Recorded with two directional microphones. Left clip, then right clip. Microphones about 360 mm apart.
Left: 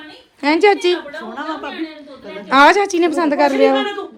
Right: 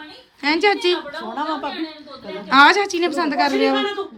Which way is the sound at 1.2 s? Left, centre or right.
Right.